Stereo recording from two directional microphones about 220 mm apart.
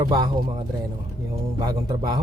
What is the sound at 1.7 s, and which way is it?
Speech, 20° right (ahead or behind).